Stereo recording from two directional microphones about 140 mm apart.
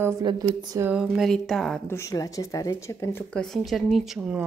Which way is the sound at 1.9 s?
20° left (ahead or behind).